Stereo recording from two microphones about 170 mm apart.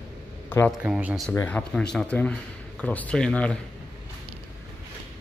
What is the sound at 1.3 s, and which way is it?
Speech, 10° left (ahead or behind).